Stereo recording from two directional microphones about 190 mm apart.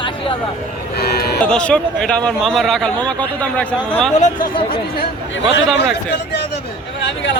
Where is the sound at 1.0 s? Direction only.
55° left (ahead or behind).